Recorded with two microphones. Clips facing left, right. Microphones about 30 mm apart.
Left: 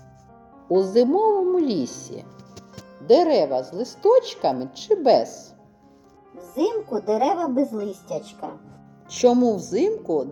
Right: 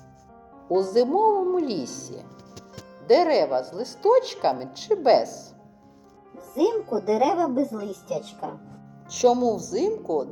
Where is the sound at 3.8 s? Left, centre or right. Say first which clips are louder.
Left 5 dB; centre.